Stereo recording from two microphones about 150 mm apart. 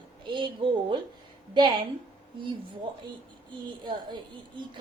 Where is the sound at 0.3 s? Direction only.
30° right (ahead or behind).